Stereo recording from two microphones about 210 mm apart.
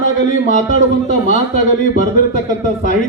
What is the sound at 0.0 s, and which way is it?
A man's voice, 40° left (ahead or behind).